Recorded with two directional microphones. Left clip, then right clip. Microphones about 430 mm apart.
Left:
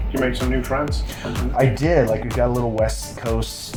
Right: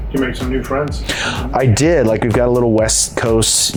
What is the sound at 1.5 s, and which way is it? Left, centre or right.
Speech, right.